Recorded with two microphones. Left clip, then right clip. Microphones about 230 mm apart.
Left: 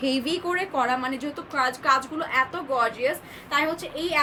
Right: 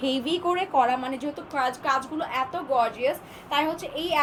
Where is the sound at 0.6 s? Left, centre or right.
Centre.